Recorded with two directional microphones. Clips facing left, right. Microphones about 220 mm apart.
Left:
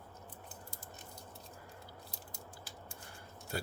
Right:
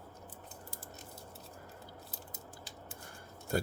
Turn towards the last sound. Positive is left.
turn(degrees=-50)  # may be behind; listen again after turning